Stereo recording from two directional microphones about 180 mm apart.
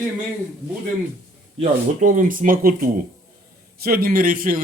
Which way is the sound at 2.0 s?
45° right (ahead or behind).